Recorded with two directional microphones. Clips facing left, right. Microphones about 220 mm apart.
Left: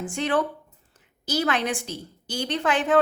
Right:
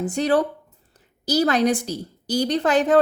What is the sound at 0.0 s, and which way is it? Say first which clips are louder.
Speech: right 5 dB; 40° right (ahead or behind).